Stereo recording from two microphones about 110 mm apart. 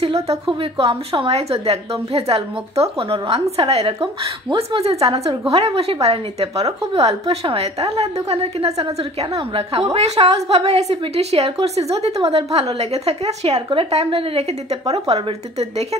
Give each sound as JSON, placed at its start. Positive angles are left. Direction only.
{"t": 0.0, "sound": "a woman's voice", "side_deg": -65}
{"t": 9.9, "sound": "a woman's voice", "side_deg": -75}